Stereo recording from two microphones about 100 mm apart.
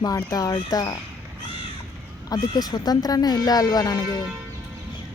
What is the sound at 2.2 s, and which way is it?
Speech, 40° left (ahead or behind).